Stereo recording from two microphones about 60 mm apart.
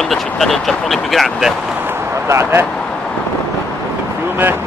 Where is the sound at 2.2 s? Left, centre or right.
Right.